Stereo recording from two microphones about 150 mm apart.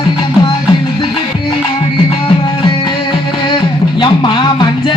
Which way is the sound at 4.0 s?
30° left (ahead or behind).